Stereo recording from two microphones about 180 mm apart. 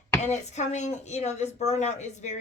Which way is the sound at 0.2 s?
40° left (ahead or behind).